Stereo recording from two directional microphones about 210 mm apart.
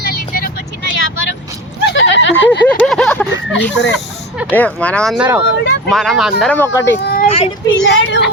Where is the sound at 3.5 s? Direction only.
55° left (ahead or behind).